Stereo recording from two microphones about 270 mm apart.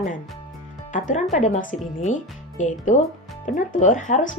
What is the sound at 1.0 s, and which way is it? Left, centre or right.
Speech, left.